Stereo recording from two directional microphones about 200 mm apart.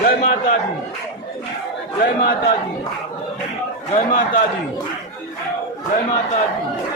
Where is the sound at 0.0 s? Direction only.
45° left (ahead or behind).